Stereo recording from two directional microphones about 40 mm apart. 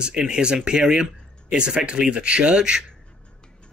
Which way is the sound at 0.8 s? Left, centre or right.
Centre.